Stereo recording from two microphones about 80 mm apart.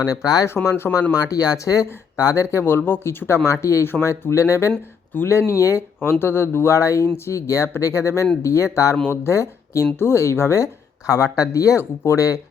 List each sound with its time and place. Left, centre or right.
0.0 s speech: left
0.6 s speech: left
1.1 s speech: left
5.5 s speech: left
6.0 s speech: left